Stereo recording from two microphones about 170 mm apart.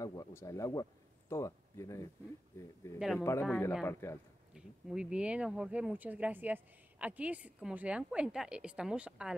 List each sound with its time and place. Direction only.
0.0 s a man's voice: 20° left (ahead or behind)
4.6 s speech: 5° right (ahead or behind)